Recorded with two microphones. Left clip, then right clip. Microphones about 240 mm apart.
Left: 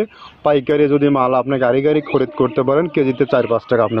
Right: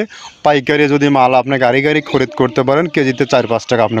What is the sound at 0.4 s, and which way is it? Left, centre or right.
A man's voice, right.